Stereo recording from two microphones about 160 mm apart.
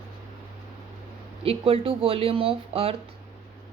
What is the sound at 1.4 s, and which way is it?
A woman's voice, 35° right (ahead or behind).